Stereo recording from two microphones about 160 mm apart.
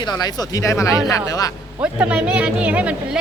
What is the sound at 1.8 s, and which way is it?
Speech, 10° right (ahead or behind).